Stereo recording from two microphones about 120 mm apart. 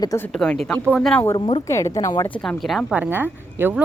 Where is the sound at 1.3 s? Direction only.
45° left (ahead or behind).